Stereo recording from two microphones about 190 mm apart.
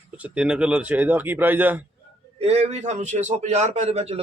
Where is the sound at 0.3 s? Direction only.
5° right (ahead or behind).